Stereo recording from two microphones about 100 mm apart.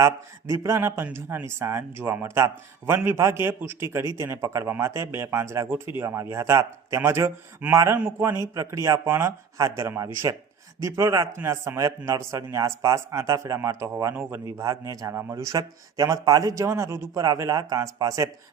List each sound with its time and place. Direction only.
0.0 s a man's voice: 30° right (ahead or behind)
14.6 s speech: 35° right (ahead or behind)